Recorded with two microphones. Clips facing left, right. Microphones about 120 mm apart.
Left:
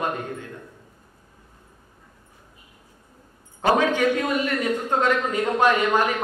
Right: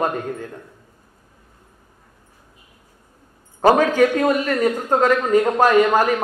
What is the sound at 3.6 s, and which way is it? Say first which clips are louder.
A man's voice: right 5 dB; 40° right (ahead or behind).